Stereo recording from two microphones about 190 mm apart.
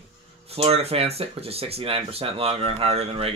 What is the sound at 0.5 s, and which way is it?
Speech, 30° right (ahead or behind).